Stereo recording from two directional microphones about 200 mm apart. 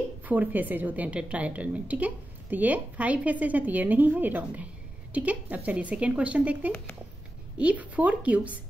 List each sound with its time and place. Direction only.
0.2 s a woman's voice: 10° right (ahead or behind)